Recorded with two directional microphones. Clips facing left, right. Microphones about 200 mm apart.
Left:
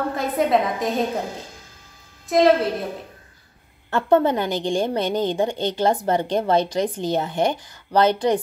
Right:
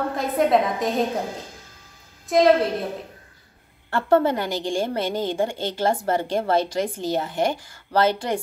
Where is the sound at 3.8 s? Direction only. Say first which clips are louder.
Left 1 dB; 20° left (ahead or behind).